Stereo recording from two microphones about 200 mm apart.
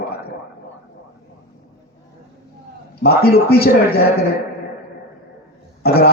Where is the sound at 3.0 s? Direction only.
50° left (ahead or behind).